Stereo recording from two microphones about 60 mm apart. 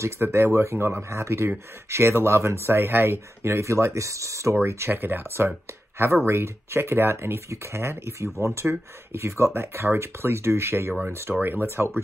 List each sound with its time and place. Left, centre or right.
0.0 s speech: right